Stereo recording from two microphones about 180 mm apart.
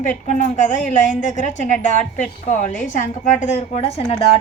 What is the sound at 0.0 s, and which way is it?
A woman's voice, 45° left (ahead or behind).